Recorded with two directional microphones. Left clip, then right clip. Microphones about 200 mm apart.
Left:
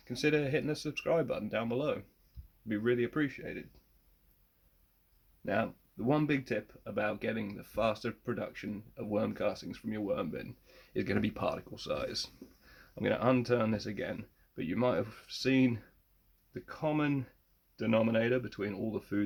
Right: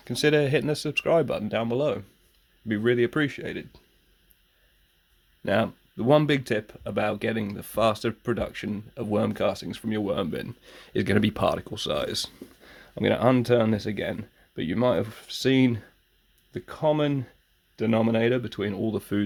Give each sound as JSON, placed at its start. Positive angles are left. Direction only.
{"t": 0.1, "sound": "speech", "side_deg": -50}
{"t": 5.5, "sound": "speech", "side_deg": -50}